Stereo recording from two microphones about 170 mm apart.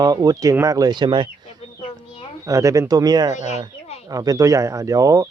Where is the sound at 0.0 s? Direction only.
20° right (ahead or behind).